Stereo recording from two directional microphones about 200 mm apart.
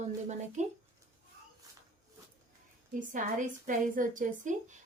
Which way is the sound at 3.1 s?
40° right (ahead or behind).